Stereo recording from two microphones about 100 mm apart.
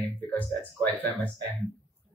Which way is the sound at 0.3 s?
15° left (ahead or behind).